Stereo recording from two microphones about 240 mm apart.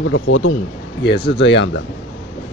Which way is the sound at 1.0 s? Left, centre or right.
Left.